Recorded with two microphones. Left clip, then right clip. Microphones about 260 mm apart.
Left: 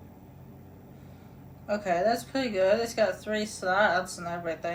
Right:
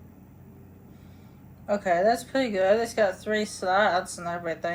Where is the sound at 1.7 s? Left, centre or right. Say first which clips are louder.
Right 3 dB; right.